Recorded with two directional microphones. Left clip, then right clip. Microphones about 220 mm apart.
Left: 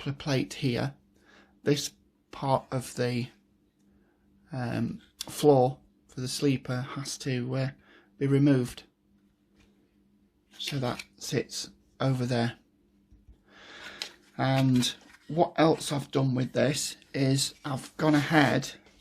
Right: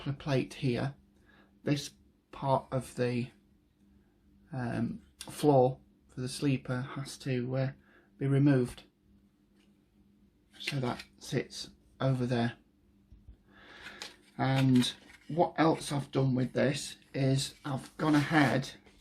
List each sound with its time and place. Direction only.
0.0 s speech: 45° left (ahead or behind)
1.3 s a sound: 45° left (ahead or behind)
2.3 s speech: 45° left (ahead or behind)
4.4 s speech: 40° left (ahead or behind)
10.6 s speech: 45° left (ahead or behind)
13.5 s a sound: 45° left (ahead or behind)
14.3 s speech: 50° left (ahead or behind)